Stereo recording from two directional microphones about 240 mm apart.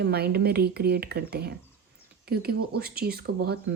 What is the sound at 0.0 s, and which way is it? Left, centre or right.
Speech, right.